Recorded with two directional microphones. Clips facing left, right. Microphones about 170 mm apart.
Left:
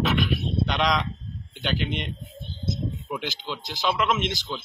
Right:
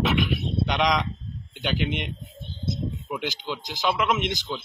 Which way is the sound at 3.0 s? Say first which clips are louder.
Right 3 dB; 5° right (ahead or behind).